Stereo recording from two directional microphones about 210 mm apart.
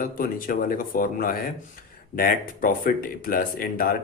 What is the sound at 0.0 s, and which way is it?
Speech, 40° left (ahead or behind).